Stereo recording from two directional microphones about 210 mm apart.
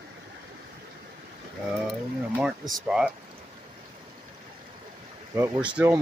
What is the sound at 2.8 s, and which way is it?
Speech, 5° right (ahead or behind).